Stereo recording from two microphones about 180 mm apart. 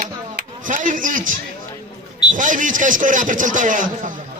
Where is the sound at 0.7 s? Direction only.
45° right (ahead or behind).